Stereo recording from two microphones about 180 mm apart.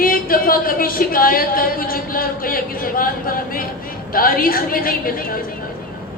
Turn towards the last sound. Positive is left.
turn(degrees=55)  # may be behind; listen again after turning